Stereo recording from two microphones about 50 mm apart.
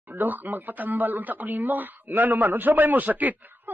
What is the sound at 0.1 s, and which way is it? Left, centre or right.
Speech, right.